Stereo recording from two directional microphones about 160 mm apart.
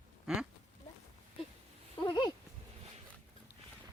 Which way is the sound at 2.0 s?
30° left (ahead or behind).